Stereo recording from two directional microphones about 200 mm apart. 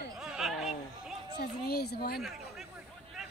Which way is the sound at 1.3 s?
50° left (ahead or behind).